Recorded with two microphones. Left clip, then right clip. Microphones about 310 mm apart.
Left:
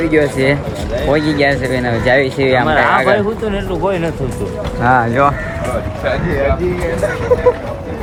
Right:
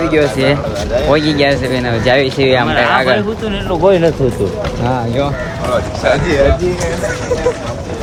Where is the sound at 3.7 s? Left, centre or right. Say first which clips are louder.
Right 9 dB; right.